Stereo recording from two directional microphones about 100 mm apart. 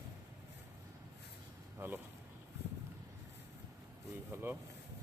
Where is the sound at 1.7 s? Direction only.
20° right (ahead or behind).